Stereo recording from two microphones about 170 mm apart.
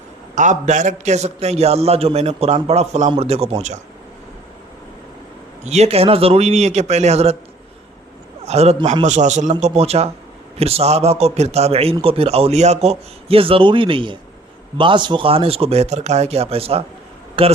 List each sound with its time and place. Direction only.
0.3 s a man's voice: 45° right (ahead or behind)
5.6 s a man's voice: 40° right (ahead or behind)
8.4 s a man's voice: 40° right (ahead or behind)